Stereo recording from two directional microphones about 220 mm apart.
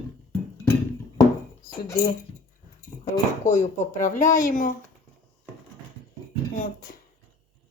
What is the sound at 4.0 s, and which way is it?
Speech, 35° left (ahead or behind).